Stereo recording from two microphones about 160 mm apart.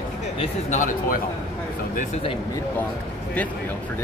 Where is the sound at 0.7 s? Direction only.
55° left (ahead or behind).